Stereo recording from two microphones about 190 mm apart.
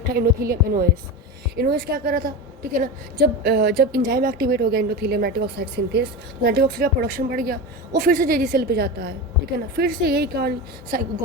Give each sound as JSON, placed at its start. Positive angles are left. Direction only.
{"t": 0.0, "sound": "a woman's voice", "side_deg": -50}